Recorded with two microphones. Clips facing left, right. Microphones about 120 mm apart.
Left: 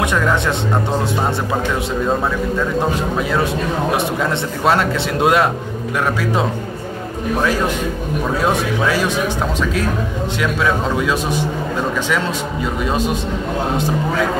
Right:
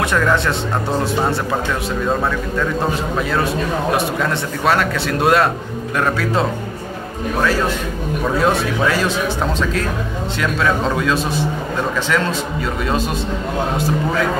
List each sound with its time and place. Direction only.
0.1 s speech: 15° left (ahead or behind)
4.2 s speech: 20° left (ahead or behind)
10.6 s speech: 10° left (ahead or behind)